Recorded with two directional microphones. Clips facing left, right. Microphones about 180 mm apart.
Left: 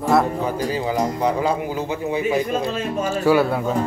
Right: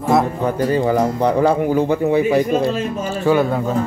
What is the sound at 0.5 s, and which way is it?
A man's voice, 60° right (ahead or behind).